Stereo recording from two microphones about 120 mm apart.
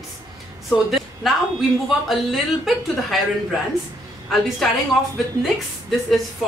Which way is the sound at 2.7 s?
Centre (ahead or behind).